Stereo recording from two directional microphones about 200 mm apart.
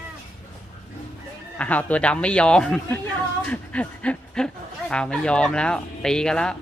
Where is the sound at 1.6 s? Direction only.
5° left (ahead or behind).